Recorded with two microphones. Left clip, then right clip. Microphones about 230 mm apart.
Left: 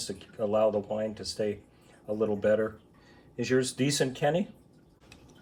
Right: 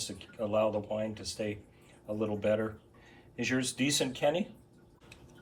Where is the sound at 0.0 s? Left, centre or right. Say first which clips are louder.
Left 4 dB; centre.